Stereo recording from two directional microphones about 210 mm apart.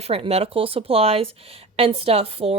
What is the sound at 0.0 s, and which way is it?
A woman's voice, 30° right (ahead or behind).